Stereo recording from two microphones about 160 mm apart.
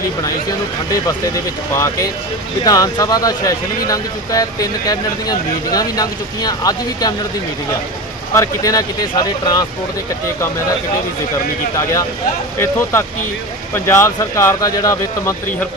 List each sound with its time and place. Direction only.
1.7 s speech: 20° left (ahead or behind)
8.3 s speech: 20° left (ahead or behind)
12.5 s speech: 15° left (ahead or behind)